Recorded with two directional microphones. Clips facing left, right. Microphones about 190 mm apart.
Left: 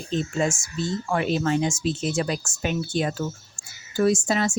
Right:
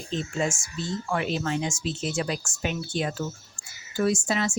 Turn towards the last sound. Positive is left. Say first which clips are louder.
# left 3 dB
turn(degrees=40)  # may be behind; listen again after turning